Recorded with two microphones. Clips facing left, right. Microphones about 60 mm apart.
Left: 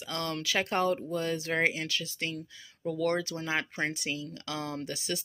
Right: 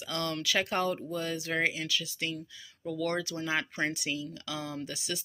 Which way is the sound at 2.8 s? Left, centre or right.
Left.